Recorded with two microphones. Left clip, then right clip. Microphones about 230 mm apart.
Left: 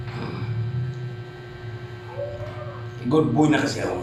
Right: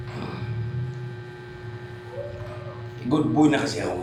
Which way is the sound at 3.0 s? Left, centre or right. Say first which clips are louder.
Left 1 dB; centre.